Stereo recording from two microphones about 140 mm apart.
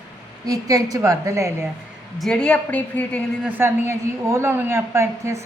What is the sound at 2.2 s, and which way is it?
A woman's voice, 5° left (ahead or behind).